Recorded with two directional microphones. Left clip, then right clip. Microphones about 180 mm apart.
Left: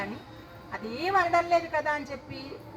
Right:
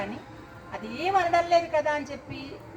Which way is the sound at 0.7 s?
40° right (ahead or behind).